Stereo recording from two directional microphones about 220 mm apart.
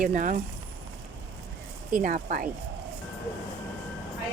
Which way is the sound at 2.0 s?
35° right (ahead or behind).